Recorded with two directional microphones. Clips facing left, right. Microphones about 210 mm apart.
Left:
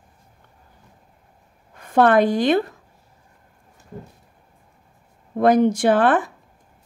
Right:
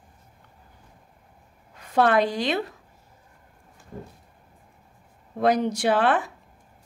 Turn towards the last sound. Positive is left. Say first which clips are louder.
# left 5 dB
turn(degrees=50)  # may be behind; listen again after turning